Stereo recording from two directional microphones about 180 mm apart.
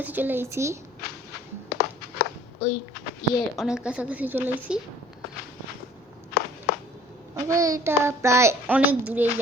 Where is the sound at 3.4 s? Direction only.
Centre (ahead or behind).